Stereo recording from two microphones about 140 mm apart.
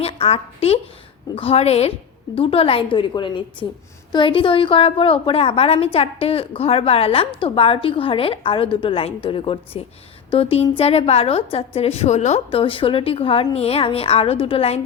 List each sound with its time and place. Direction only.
0.0 s a woman's voice: 45° left (ahead or behind)